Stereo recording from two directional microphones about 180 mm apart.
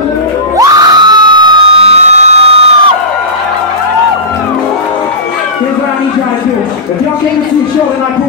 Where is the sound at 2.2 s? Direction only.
35° right (ahead or behind).